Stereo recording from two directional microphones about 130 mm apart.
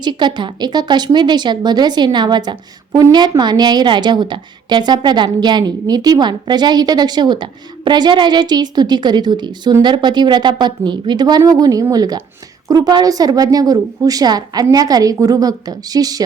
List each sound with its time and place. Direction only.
0.0 s a woman's voice: 35° right (ahead or behind)